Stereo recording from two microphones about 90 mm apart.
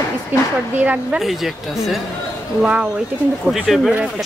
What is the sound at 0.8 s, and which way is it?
Speech, 15° right (ahead or behind).